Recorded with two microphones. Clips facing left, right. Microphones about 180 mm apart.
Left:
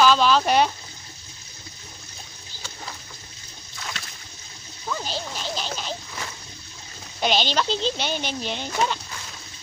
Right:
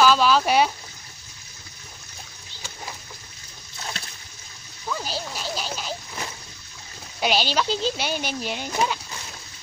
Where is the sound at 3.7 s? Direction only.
30° right (ahead or behind).